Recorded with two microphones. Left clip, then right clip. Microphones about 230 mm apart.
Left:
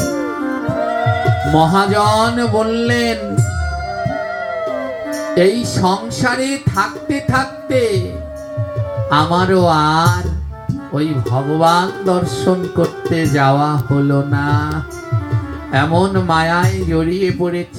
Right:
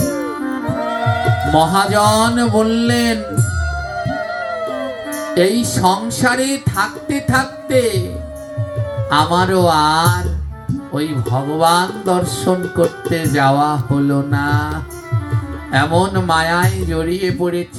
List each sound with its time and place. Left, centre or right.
0.0 s music: right
0.7 s speech: right
3.9 s music: right
9.0 s music: right